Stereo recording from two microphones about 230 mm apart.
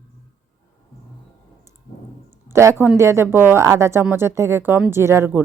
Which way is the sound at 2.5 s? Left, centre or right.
Centre.